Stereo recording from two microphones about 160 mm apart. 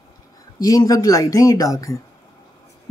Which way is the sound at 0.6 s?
20° left (ahead or behind).